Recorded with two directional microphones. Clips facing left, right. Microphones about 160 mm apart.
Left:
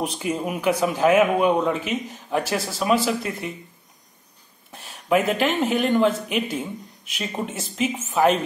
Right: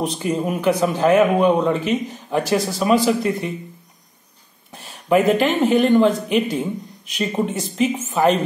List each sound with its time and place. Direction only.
0.0 s speech: 5° left (ahead or behind)
4.7 s speech: centre (ahead or behind)